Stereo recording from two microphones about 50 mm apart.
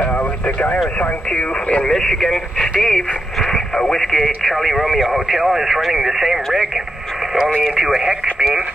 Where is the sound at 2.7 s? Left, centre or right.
Centre.